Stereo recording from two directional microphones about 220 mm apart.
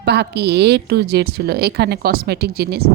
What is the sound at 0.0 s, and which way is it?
A woman's voice, 50° right (ahead or behind).